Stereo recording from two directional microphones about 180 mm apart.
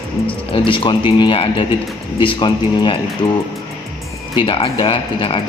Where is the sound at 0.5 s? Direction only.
30° left (ahead or behind).